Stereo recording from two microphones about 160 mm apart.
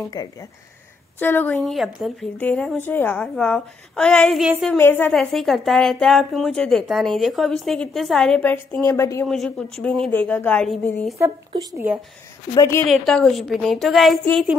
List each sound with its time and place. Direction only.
0.1 s speech: 25° left (ahead or behind)
1.2 s a woman's voice: 10° left (ahead or behind)
4.7 s a woman's voice: 10° left (ahead or behind)
9.3 s a woman's voice: 5° left (ahead or behind)
11.1 s speech: 15° right (ahead or behind)
12.5 s a woman's voice: 15° left (ahead or behind)
12.8 s a woman's voice: centre (ahead or behind)